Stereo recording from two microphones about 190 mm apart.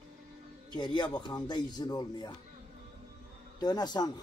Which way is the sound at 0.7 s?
25° left (ahead or behind).